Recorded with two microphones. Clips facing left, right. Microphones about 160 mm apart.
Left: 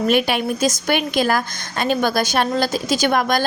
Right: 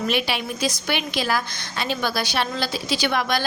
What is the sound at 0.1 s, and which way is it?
A woman's voice, 50° left (ahead or behind).